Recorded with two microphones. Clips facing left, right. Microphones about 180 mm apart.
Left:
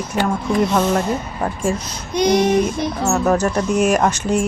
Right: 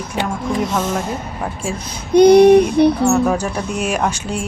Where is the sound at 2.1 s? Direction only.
60° right (ahead or behind).